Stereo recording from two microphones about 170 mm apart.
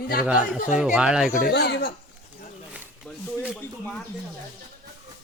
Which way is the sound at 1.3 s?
60° left (ahead or behind).